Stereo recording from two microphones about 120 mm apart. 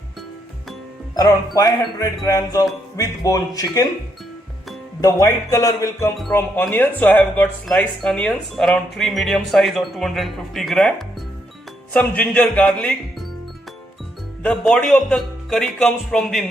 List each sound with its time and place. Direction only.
1.1 s music: 30° left (ahead or behind)
2.9 s speech: 25° left (ahead or behind)
4.9 s speech: 30° left (ahead or behind); by 13.2 s 5° left (ahead or behind)
14.4 s speech: 5° left (ahead or behind)